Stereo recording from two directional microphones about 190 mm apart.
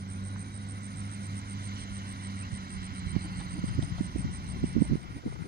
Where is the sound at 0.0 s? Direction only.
55° right (ahead or behind).